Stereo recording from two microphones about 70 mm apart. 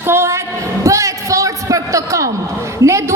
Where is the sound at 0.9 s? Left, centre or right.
Right.